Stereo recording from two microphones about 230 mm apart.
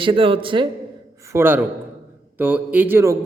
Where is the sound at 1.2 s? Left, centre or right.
Centre.